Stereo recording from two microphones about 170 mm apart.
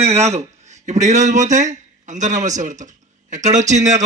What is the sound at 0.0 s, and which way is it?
Speech, 40° right (ahead or behind).